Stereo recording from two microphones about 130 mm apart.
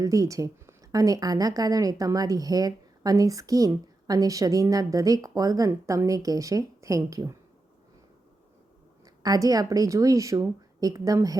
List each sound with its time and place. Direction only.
0.0 s a woman's voice: 25° right (ahead or behind)
9.2 s a woman's voice: 30° right (ahead or behind)